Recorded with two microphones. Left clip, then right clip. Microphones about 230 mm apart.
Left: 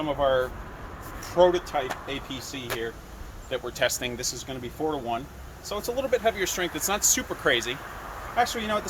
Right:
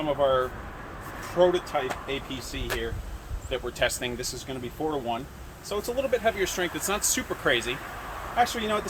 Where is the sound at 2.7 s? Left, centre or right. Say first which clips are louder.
Even; centre.